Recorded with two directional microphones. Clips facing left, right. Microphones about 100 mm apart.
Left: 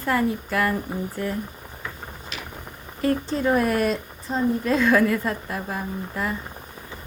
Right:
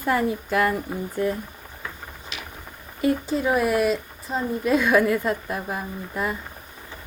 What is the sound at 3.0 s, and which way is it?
Speech, 10° right (ahead or behind).